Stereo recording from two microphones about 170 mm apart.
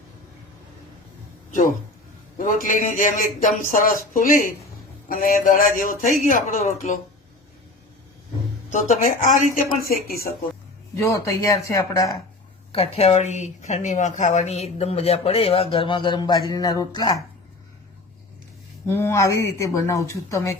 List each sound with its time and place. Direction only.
1.5 s a man's voice: 50° left (ahead or behind)
8.7 s a man's voice: 45° left (ahead or behind)
10.9 s speech: 20° left (ahead or behind)
12.7 s a woman's voice: 35° left (ahead or behind)
18.9 s speech: 15° left (ahead or behind)